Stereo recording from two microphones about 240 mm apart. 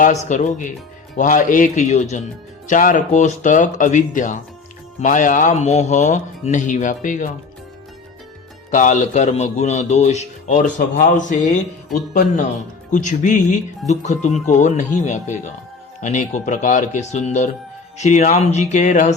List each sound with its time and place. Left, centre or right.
0.0 s a man's voice: left
8.7 s a man's voice: left
12.9 s a man's voice: left